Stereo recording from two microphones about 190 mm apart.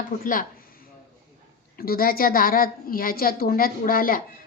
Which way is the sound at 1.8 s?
50° left (ahead or behind).